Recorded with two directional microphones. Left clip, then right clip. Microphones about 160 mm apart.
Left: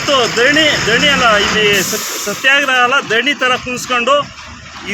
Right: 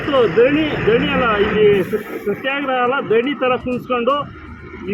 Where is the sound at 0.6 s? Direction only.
35° left (ahead or behind).